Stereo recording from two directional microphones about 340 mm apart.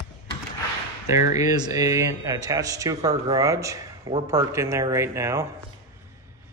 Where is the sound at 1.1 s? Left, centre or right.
Centre.